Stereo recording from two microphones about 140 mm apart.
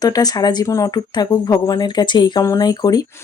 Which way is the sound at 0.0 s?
25° left (ahead or behind).